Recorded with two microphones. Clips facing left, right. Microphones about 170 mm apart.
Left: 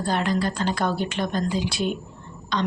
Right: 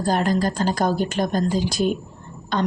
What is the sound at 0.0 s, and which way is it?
A woman's voice, 40° right (ahead or behind).